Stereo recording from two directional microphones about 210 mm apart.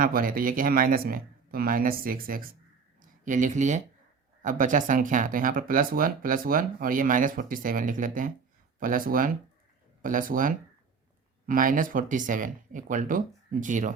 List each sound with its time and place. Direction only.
0.0 s speech: 40° right (ahead or behind)